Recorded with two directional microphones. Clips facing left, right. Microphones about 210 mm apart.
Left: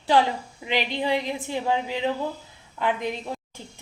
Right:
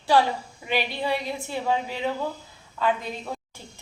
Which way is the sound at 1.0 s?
15° left (ahead or behind).